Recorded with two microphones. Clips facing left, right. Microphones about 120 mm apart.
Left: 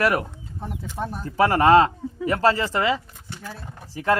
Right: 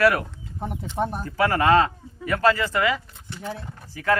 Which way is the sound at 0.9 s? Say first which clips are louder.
Right 5 dB; 25° right (ahead or behind).